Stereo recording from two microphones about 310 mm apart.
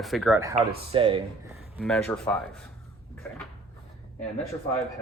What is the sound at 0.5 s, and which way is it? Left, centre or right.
Speech, centre.